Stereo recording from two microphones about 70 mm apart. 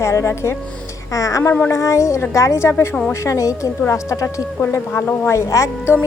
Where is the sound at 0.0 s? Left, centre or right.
Left.